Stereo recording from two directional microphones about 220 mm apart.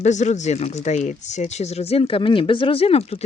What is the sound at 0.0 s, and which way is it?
Speech, 30° left (ahead or behind).